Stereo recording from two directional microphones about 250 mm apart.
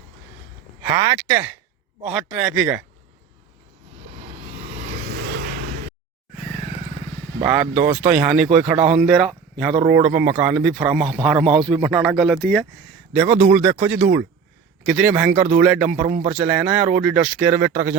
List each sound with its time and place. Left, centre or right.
0.8 s speech: centre
5.1 s vehicle: right
7.4 s speech: centre